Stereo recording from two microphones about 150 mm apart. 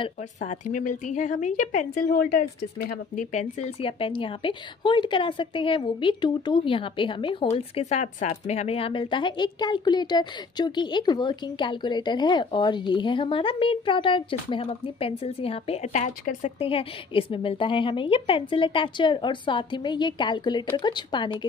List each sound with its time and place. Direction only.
0.4 s a woman's voice: 55° left (ahead or behind); by 3.3 s 80° left
3.3 s speech: 50° left (ahead or behind)
4.0 s a woman's voice: 35° left (ahead or behind); by 16.6 s 50° left (ahead or behind)
16.6 s a woman's voice: 40° left (ahead or behind)